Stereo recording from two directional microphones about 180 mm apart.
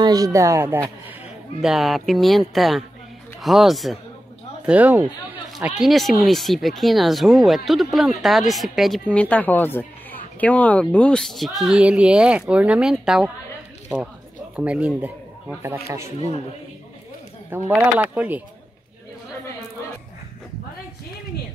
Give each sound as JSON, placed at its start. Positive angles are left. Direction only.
{"t": 0.0, "sound": "speech", "side_deg": -20}
{"t": 1.6, "sound": "speech", "side_deg": 0}
{"t": 14.6, "sound": "speech", "side_deg": -5}
{"t": 17.5, "sound": "speech", "side_deg": -10}